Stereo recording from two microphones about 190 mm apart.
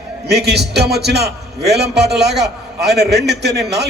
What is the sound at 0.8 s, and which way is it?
A man's voice, 60° right (ahead or behind).